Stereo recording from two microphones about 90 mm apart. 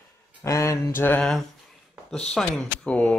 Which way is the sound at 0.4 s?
35° left (ahead or behind).